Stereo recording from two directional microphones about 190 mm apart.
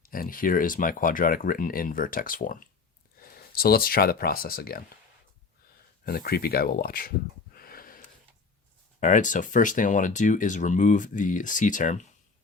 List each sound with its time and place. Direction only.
0.0 s speech: 50° left (ahead or behind)
6.1 s speech: 50° left (ahead or behind)
7.5 s sniff: 50° left (ahead or behind)
9.0 s speech: 40° left (ahead or behind)